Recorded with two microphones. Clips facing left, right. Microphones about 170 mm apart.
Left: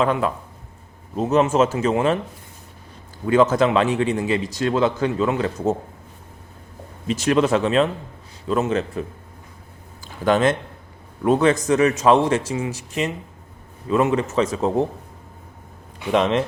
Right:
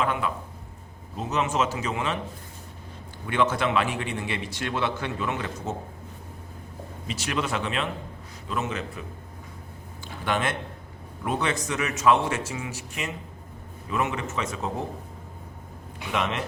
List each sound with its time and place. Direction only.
0.0 s a man's voice: 40° left (ahead or behind)
3.2 s a man's voice: 40° left (ahead or behind)
7.1 s a man's voice: 40° left (ahead or behind)
10.2 s a man's voice: 40° left (ahead or behind)
16.1 s a man's voice: 35° left (ahead or behind)